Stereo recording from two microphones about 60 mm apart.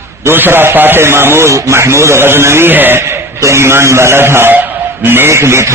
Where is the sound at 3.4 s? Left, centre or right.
Right.